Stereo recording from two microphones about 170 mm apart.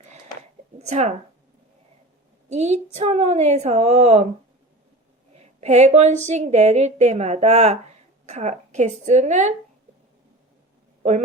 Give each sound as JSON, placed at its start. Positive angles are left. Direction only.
{"t": 0.8, "sound": "speech", "side_deg": -40}
{"t": 2.5, "sound": "a woman's voice", "side_deg": -40}
{"t": 5.3, "sound": "a woman's voice", "side_deg": -40}